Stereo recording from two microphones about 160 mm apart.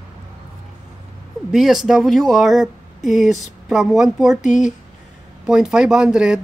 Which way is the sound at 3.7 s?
Centre (ahead or behind).